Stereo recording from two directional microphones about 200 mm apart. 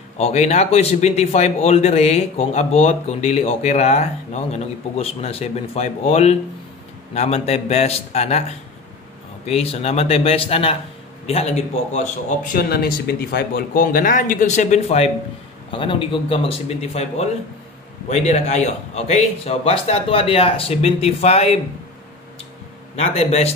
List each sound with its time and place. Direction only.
0.2 s a man's voice: 35° left (ahead or behind)
23.1 s speech: 30° left (ahead or behind)